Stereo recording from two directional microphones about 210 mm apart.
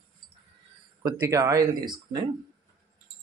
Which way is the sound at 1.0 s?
10° right (ahead or behind).